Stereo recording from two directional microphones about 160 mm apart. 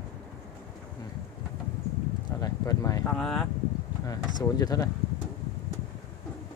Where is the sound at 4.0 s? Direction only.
20° left (ahead or behind).